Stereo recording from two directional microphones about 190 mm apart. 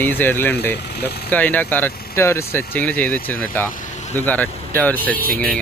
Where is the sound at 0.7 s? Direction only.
60° left (ahead or behind).